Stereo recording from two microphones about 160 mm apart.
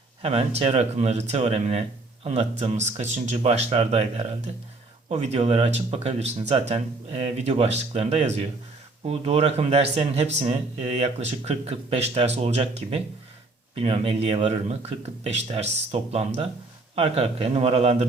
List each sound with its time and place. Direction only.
0.2 s speech: 40° right (ahead or behind)